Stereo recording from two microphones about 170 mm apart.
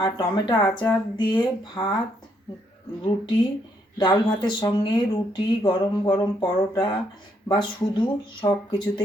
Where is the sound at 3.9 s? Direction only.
25° left (ahead or behind).